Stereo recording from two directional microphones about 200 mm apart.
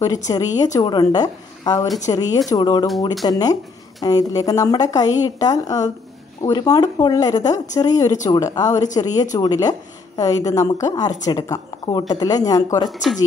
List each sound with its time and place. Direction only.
0.3 s a woman's voice: 20° left (ahead or behind)
12.8 s speech: centre (ahead or behind)